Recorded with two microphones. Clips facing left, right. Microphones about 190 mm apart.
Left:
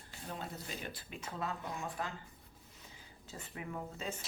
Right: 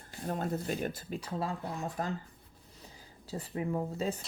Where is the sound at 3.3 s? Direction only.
35° right (ahead or behind).